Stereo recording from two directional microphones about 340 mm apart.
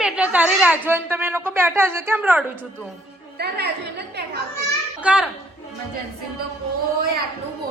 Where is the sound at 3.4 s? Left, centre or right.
Right.